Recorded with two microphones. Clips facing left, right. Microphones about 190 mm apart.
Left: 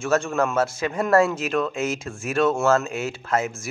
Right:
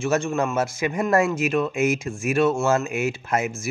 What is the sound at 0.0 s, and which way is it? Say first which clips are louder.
Speech: even; 10° right (ahead or behind).